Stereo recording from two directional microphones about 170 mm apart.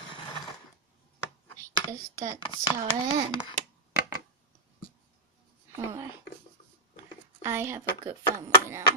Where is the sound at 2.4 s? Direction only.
25° left (ahead or behind).